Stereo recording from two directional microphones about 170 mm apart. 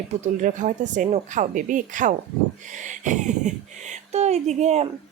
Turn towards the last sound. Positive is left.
turn(degrees=-40)  # may be behind; listen again after turning